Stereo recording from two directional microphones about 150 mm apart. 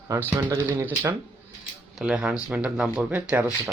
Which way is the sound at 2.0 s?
5° right (ahead or behind).